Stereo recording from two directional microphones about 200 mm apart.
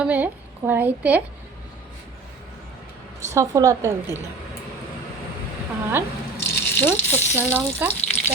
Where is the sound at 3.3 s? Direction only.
15° right (ahead or behind).